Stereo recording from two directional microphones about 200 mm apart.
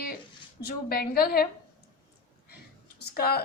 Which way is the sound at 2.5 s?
50° left (ahead or behind).